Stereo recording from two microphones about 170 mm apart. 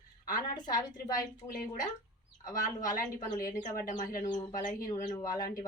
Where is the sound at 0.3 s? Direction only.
25° left (ahead or behind).